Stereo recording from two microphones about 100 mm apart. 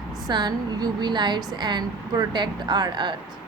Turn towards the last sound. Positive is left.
turn(degrees=-50)  # may be behind; listen again after turning